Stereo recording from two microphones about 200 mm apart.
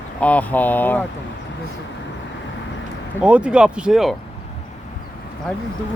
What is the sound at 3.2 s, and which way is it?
Speech, 5° right (ahead or behind).